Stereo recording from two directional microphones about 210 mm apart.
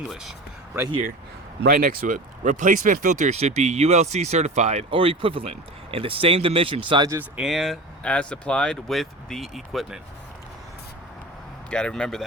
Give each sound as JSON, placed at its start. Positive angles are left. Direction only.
{"t": 0.1, "sound": "speech", "side_deg": 0}
{"t": 1.6, "sound": "speech", "side_deg": -40}
{"t": 11.7, "sound": "speech", "side_deg": 5}